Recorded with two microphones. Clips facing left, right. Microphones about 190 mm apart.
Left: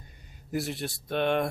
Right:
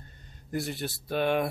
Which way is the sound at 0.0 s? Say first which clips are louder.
Right 1 dB; 10° left (ahead or behind).